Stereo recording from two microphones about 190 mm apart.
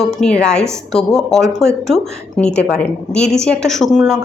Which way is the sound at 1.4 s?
15° right (ahead or behind).